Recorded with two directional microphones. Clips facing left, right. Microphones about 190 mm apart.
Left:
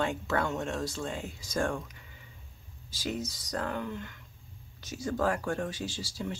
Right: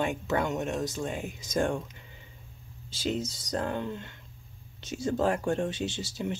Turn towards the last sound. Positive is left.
turn(degrees=-20)  # may be behind; listen again after turning